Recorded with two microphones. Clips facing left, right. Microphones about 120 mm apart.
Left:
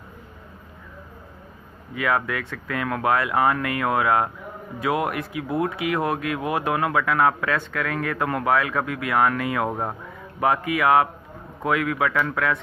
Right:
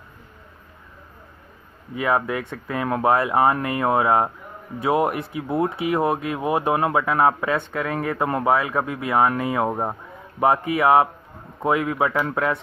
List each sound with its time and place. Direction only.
2.0 s speech: 25° right (ahead or behind)
10.4 s speech: 30° right (ahead or behind)